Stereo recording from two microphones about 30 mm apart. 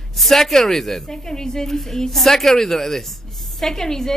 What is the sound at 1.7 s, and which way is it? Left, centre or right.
A woman's voice, centre.